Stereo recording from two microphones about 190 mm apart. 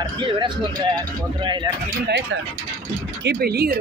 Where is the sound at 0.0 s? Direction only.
25° right (ahead or behind).